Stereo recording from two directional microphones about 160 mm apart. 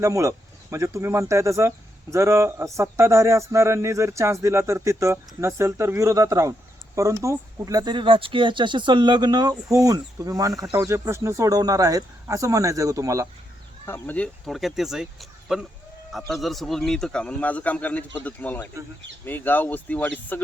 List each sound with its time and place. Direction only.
0.0 s speech: 20° right (ahead or behind)
13.8 s a man's voice: 10° left (ahead or behind)